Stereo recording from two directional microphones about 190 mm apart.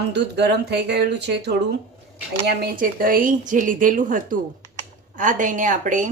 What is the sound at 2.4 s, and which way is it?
A woman's voice, 50° right (ahead or behind).